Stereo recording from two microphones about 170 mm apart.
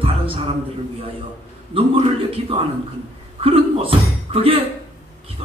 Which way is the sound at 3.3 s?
35° right (ahead or behind).